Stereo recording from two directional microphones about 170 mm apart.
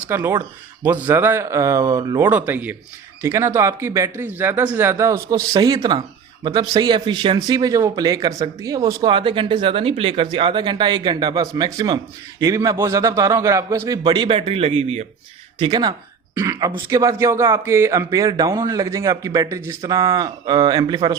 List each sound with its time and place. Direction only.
0.1 s speech: 15° right (ahead or behind)
16.3 s speech: 15° right (ahead or behind)